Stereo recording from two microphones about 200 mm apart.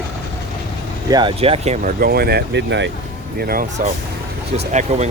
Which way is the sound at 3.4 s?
45° right (ahead or behind).